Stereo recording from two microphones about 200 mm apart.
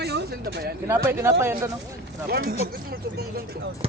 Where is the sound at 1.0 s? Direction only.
10° right (ahead or behind).